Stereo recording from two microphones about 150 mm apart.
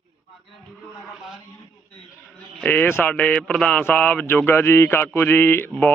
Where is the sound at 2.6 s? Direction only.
10° left (ahead or behind).